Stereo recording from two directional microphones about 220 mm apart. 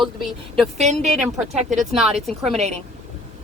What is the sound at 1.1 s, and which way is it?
Speech, centre (ahead or behind).